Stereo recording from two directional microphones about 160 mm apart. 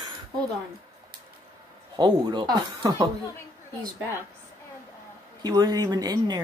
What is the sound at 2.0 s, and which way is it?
Speech, 30° right (ahead or behind).